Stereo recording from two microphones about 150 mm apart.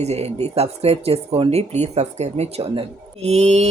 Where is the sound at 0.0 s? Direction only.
45° right (ahead or behind).